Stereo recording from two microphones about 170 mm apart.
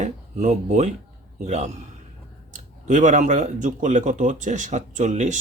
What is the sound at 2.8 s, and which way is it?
A man's voice, 45° right (ahead or behind).